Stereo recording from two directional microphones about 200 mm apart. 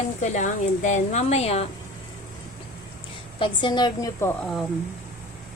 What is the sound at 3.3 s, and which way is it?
A woman's voice, 25° left (ahead or behind).